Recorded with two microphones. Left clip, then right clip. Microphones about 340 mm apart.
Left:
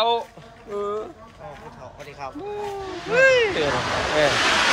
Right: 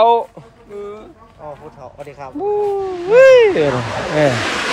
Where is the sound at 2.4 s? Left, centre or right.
Centre.